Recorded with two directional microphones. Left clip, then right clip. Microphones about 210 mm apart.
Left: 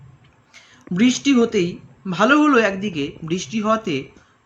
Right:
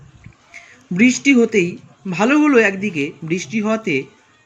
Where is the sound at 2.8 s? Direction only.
40° left (ahead or behind).